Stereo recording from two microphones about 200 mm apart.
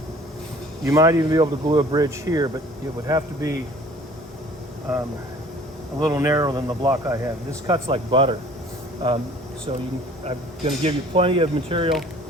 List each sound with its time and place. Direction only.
0.9 s speech: 15° right (ahead or behind)
6.1 s speech: 15° right (ahead or behind)
10.2 s speech: 30° right (ahead or behind)